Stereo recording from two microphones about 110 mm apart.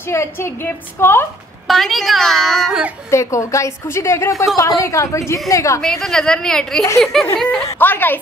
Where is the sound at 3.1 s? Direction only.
25° left (ahead or behind).